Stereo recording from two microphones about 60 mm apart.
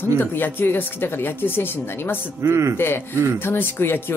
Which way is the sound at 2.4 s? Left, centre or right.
Right.